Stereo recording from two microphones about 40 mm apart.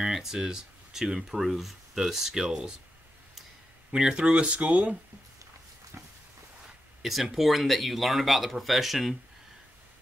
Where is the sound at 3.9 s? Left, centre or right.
Centre; by 5.0 s right.